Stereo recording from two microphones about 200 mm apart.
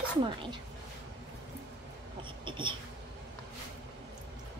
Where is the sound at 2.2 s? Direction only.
25° right (ahead or behind).